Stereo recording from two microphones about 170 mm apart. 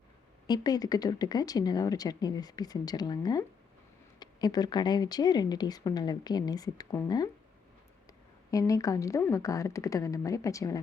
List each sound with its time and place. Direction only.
0.4 s a woman's voice: 25° left (ahead or behind)
8.4 s a woman's voice: 20° left (ahead or behind)